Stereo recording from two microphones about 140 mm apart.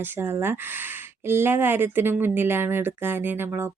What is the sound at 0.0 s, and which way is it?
Speech, 15° right (ahead or behind).